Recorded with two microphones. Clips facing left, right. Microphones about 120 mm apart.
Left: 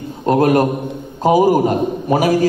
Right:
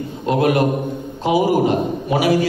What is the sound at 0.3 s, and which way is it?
A man's voice, 40° left (ahead or behind).